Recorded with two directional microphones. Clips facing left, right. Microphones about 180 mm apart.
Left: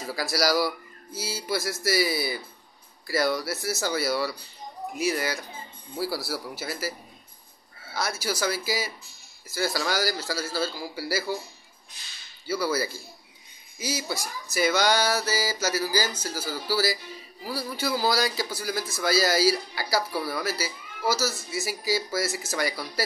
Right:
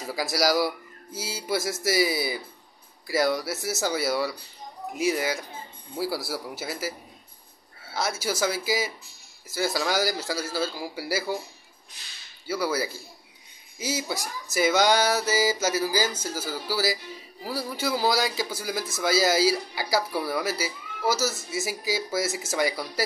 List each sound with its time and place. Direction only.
0.1 s speech: 20° right (ahead or behind)
7.9 s speech: 20° right (ahead or behind)
12.5 s speech: 15° right (ahead or behind)